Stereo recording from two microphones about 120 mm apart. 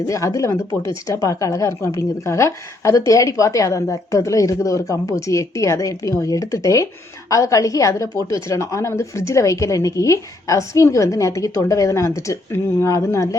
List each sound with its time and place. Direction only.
0.1 s speech: 25° left (ahead or behind)